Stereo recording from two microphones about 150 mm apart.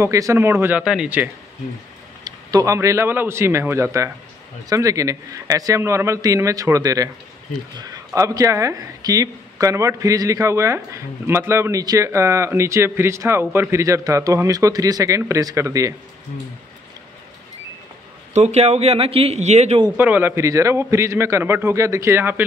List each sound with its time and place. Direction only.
0.0 s a man's voice: 20° right (ahead or behind)
2.2 s a man's voice: 25° right (ahead or behind)
8.1 s speech: 20° right (ahead or behind)
18.3 s a man's voice: 45° right (ahead or behind)
20.0 s a man's voice: 15° right (ahead or behind)